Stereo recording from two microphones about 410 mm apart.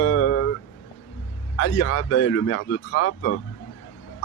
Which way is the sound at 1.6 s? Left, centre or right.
Left.